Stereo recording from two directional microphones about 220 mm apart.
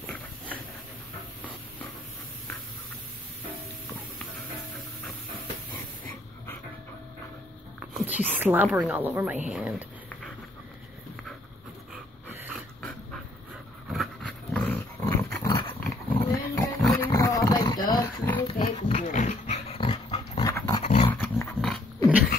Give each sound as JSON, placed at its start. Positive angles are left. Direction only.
{"t": 0.0, "sound": "a sound", "side_deg": 5}
{"t": 7.9, "sound": "a woman's voice", "side_deg": -5}
{"t": 13.9, "sound": "dog", "side_deg": 5}
{"t": 15.8, "sound": "roaring cats", "side_deg": 5}
{"t": 18.6, "sound": "dog", "side_deg": 30}
{"t": 20.8, "sound": "dog", "side_deg": 30}
{"t": 21.1, "sound": "dog", "side_deg": 10}